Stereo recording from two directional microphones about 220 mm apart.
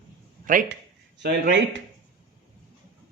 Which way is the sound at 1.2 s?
55° right (ahead or behind).